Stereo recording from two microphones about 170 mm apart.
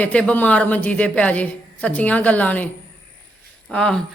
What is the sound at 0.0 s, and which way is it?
A woman's voice, 5° left (ahead or behind).